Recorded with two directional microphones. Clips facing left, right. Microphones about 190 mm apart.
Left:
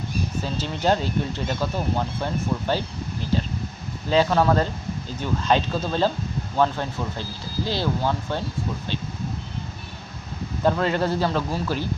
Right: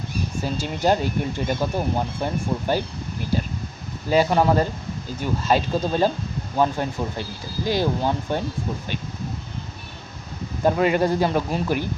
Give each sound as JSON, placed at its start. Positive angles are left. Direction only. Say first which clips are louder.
{"t": 0.4, "sound": "speech", "louder": "right 2 dB", "side_deg": -10}
{"t": 4.1, "sound": "speech", "louder": "right 1 dB", "side_deg": -15}
{"t": 10.6, "sound": "speech", "louder": "right 3 dB", "side_deg": -10}